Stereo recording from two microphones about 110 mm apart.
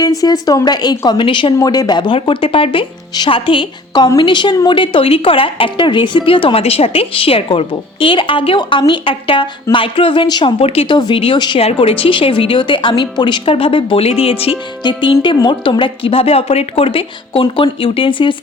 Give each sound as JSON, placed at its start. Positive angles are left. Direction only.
{"t": 0.0, "sound": "a woman's voice", "side_deg": 35}
{"t": 1.5, "sound": "a woman's voice", "side_deg": 35}
{"t": 10.6, "sound": "speech", "side_deg": 60}
{"t": 10.9, "sound": "a woman's voice", "side_deg": 45}
{"t": 14.8, "sound": "a woman's voice", "side_deg": 45}